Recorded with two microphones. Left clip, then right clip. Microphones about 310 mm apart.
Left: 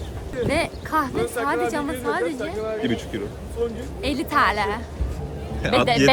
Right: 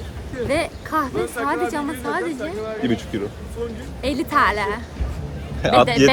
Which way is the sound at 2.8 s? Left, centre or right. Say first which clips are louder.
Right 2 dB; centre.